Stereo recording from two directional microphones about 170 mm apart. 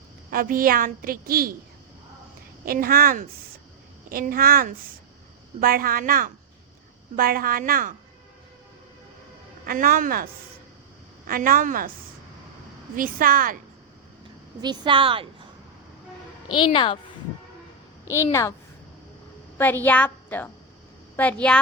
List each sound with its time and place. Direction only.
0.3 s a woman's voice: 55° right (ahead or behind)
2.6 s a woman's voice: 60° right (ahead or behind)
9.6 s a woman's voice: 55° right (ahead or behind)
11.3 s a woman's voice: 55° right (ahead or behind)
13.0 s a woman's voice: 55° right (ahead or behind)
14.6 s a woman's voice: 25° right (ahead or behind)
16.5 s speech: 30° left (ahead or behind)
18.1 s a woman's voice: 15° left (ahead or behind)
19.5 s a woman's voice: 10° left (ahead or behind)